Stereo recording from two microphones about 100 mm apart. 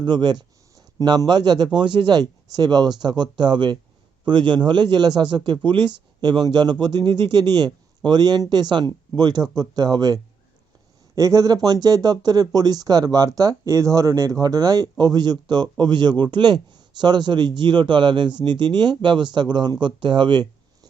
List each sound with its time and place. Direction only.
0.0 s speech: 50° right (ahead or behind)